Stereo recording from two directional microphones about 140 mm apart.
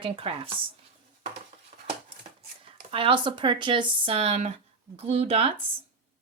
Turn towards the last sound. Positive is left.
turn(degrees=-40)  # may be behind; listen again after turning